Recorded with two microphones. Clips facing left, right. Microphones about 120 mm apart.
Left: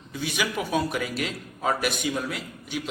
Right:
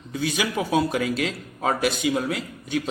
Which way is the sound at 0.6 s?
25° right (ahead or behind).